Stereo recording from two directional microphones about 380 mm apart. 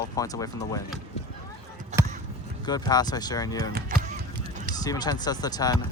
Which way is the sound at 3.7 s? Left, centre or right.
Right.